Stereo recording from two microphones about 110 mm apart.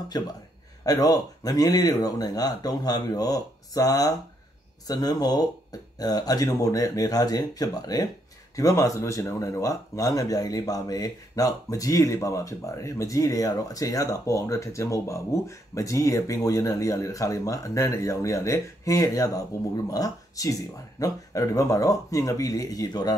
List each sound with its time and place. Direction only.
0.1 s speech: 40° left (ahead or behind)